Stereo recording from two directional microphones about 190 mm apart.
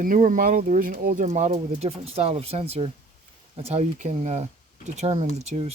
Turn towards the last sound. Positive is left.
turn(degrees=-35)  # may be behind; listen again after turning